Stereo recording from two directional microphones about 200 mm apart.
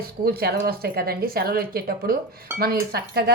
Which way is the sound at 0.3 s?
50° right (ahead or behind).